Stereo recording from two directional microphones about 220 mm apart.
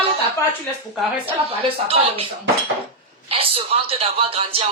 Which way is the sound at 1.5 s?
25° right (ahead or behind).